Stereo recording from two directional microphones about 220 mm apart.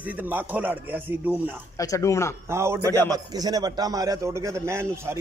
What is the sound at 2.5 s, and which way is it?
A man's voice, 10° right (ahead or behind).